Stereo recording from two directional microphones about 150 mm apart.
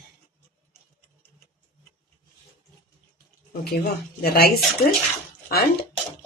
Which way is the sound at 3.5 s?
85° left.